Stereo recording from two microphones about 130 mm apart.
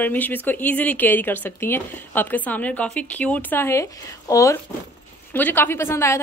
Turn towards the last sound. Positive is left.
turn(degrees=20)  # may be behind; listen again after turning